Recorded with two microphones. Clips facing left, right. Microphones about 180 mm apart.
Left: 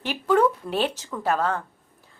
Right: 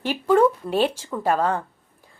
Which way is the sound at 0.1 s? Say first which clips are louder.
Right 3 dB; 10° right (ahead or behind).